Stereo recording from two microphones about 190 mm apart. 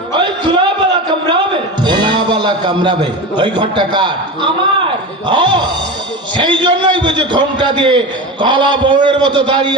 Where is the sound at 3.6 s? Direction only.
25° right (ahead or behind).